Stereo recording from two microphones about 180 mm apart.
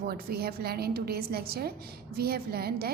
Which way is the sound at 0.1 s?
60° right (ahead or behind).